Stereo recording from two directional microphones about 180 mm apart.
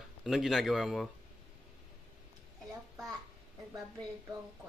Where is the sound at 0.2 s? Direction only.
Centre (ahead or behind).